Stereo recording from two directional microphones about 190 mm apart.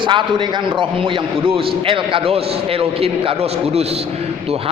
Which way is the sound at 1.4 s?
30° right (ahead or behind).